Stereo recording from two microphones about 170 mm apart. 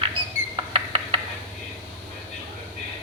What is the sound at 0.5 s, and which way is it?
Rodents, 30° right (ahead or behind).